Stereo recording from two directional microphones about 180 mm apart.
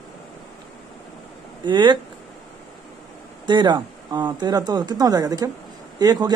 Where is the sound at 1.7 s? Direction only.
25° right (ahead or behind).